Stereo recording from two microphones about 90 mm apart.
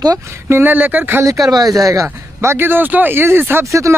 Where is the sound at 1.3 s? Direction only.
40° right (ahead or behind).